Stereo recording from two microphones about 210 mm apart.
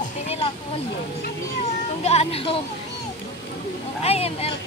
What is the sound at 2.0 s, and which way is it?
Speech, 30° left (ahead or behind).